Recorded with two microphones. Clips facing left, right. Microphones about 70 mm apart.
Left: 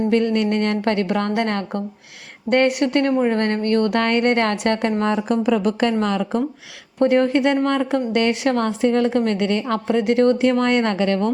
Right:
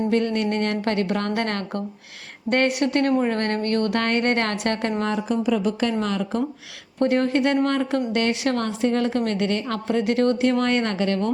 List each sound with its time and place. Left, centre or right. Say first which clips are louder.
0.6 s a woman's voice: left 3 dB; left
1.3 s a woman's voice: left 3 dB; centre; by 5.2 s left
5.3 s a woman's voice: left 2 dB; left
9.8 s speech: left 3 dB; left
10.1 s a woman's voice: left 4 dB; left